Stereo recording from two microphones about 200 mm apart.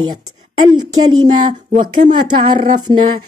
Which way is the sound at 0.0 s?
20° right (ahead or behind).